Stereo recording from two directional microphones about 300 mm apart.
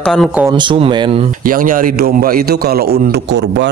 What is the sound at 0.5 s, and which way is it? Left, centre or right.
Speech, centre.